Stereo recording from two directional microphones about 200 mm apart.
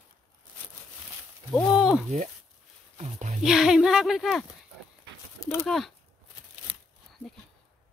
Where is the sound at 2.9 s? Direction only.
35° right (ahead or behind).